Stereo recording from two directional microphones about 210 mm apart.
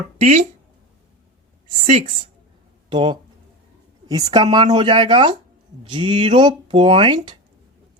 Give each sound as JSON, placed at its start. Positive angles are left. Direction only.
{"t": 0.2, "sound": "speech", "side_deg": -30}
{"t": 1.9, "sound": "speech", "side_deg": -30}